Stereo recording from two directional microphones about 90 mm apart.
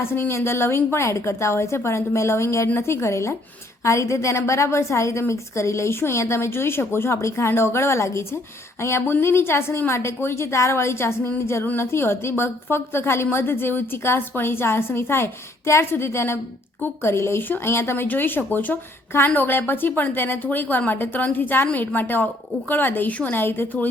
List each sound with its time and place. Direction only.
0.0 s a woman's voice: 25° left (ahead or behind)